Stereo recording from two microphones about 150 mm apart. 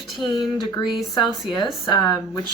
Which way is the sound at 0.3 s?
25° left (ahead or behind).